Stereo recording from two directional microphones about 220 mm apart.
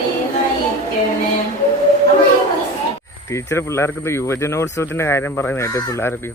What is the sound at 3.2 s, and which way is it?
Speech, 10° left (ahead or behind).